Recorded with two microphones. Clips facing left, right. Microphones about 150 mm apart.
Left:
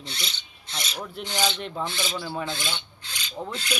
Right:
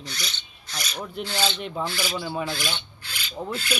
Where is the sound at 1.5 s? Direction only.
5° right (ahead or behind).